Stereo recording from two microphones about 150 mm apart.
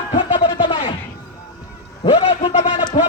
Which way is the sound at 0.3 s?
30° left (ahead or behind).